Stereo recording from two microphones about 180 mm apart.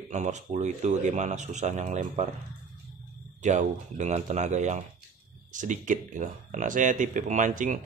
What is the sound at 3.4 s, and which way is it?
Speech, 40° right (ahead or behind).